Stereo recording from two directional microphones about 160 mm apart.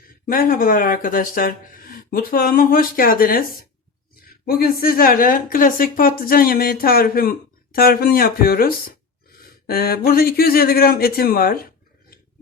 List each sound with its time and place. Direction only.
0.3 s a woman's voice: 60° left (ahead or behind)